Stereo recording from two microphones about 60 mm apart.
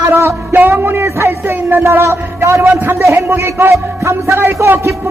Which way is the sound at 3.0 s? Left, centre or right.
Right.